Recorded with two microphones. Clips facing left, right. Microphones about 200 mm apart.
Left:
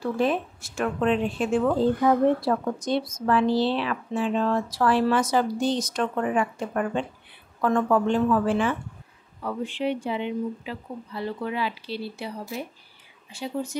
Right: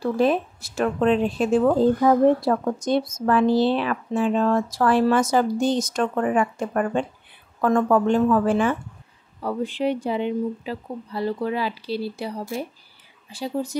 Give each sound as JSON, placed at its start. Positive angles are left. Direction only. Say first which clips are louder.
{"t": 0.0, "sound": "speech", "louder": "right 4 dB", "side_deg": -35}